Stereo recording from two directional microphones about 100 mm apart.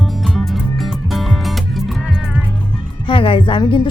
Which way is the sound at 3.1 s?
60° left (ahead or behind).